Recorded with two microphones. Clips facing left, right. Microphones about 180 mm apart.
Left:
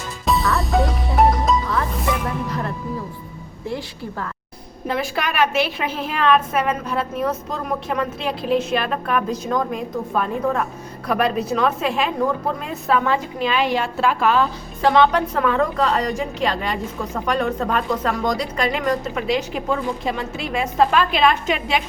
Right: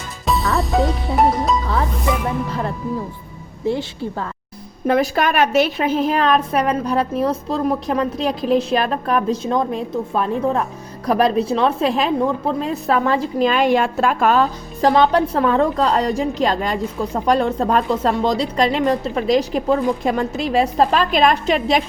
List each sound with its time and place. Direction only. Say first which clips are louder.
0.3 s music: right 1 dB; centre (ahead or behind)
3.7 s a woman's voice: right 7 dB; 25° right (ahead or behind)
4.9 s a woman's voice: right 7 dB; 45° right (ahead or behind)